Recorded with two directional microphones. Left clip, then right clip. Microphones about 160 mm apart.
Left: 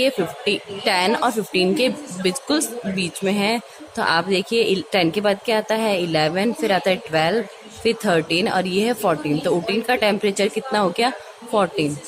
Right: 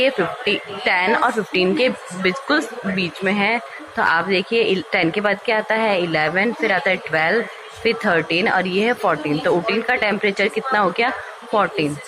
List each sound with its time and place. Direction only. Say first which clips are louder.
0.0 s a woman's voice: right 2 dB; 55° left (ahead or behind)